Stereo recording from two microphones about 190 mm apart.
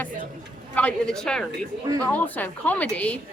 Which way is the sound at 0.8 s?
5° left (ahead or behind).